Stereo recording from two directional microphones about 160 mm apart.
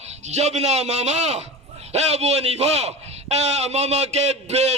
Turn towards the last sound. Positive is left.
turn(degrees=-45)  # may be behind; listen again after turning